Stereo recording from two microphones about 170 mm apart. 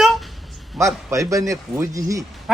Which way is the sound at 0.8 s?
20° right (ahead or behind).